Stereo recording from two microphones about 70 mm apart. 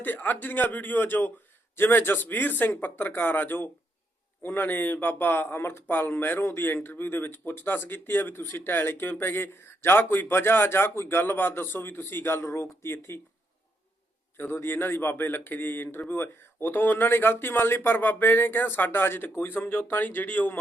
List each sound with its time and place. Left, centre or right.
0.0 s a man's voice: left
14.3 s a man's voice: left